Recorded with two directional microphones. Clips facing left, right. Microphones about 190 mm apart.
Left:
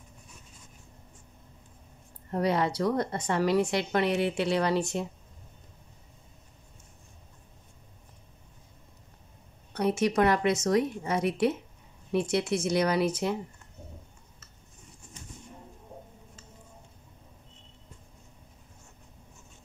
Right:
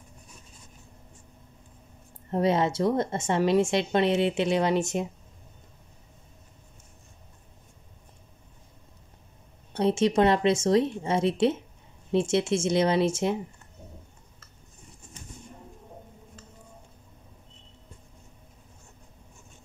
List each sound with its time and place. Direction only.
2.3 s speech: 20° right (ahead or behind)
9.7 s speech: 25° right (ahead or behind)